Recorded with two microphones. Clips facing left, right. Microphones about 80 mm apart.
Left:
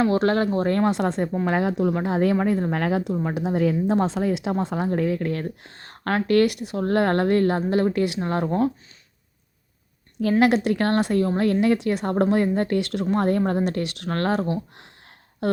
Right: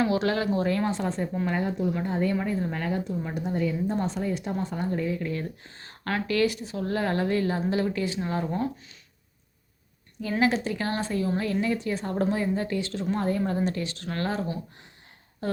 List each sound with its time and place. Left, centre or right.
0.1 s speech: left
0.9 s speech: left
1.5 s speech: left
2.4 s speech: left
10.4 s speech: left